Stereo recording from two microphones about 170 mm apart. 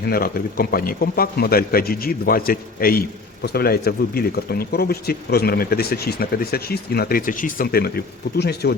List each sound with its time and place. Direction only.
0.0 s speech: 60° left (ahead or behind)
8.4 s speech: 75° left (ahead or behind)